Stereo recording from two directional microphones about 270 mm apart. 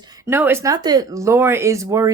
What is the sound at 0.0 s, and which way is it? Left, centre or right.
Speech, centre.